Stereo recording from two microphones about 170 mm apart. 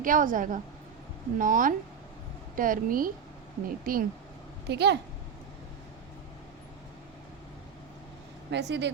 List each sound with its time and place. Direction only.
0.0 s a woman's voice: 50° right (ahead or behind)
4.7 s speech: 85° right
8.4 s speech: 90° right